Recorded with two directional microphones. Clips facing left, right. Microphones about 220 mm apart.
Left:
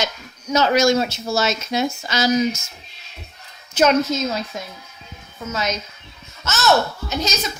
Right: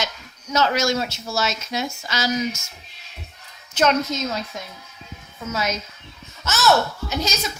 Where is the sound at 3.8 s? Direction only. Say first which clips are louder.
Left 3 dB; 5° left (ahead or behind).